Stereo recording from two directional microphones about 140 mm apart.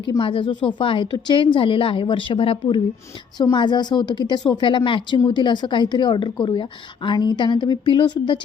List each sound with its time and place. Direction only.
0.2 s a woman's voice: 40° left (ahead or behind)